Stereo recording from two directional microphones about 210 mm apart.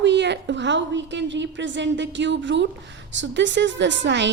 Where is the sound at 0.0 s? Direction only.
55° right (ahead or behind).